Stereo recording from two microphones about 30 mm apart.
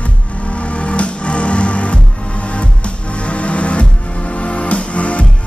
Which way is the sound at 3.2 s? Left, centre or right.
Left.